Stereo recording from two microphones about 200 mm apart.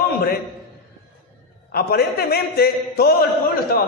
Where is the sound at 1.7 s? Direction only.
50° left (ahead or behind).